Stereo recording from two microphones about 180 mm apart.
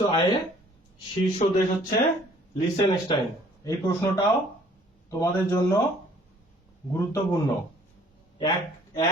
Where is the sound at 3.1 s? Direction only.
25° left (ahead or behind).